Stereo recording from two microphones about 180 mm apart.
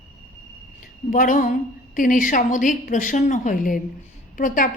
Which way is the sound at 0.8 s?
45° left (ahead or behind).